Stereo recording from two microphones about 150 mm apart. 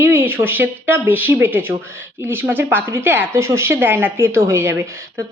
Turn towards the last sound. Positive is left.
turn(degrees=-20)  # may be behind; listen again after turning